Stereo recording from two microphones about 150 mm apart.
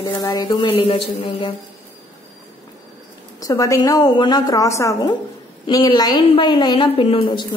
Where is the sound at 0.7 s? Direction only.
40° left (ahead or behind).